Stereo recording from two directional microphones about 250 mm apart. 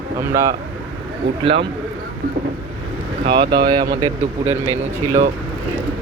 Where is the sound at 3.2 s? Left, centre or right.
Centre.